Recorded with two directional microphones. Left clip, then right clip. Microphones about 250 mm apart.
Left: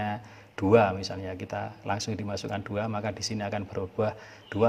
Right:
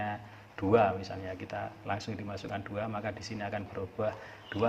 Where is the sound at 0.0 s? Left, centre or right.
Left.